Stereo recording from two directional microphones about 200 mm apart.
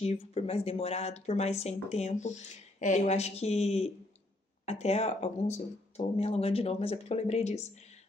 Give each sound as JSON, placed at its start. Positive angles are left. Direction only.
{"t": 0.0, "sound": "speech", "side_deg": 30}